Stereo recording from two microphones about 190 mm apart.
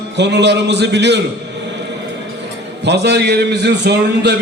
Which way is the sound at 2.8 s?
60° right (ahead or behind).